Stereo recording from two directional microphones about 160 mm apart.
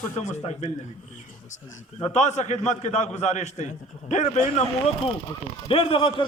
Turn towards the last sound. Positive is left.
turn(degrees=30)  # may be behind; listen again after turning